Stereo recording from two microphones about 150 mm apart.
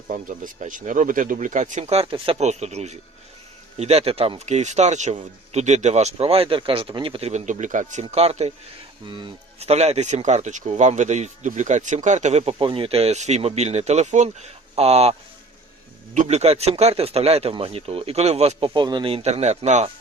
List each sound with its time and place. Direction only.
0.1 s speech: 60° right (ahead or behind)
1.8 s speech: 40° right (ahead or behind); by 8.0 s 55° right (ahead or behind)
8.0 s speech: 45° right (ahead or behind)
9.0 s speech: 30° right (ahead or behind)
9.6 s speech: 45° right (ahead or behind)
16.1 s speech: 45° right (ahead or behind)
18.7 s speech: 30° right (ahead or behind); by 19.9 s 50° right (ahead or behind)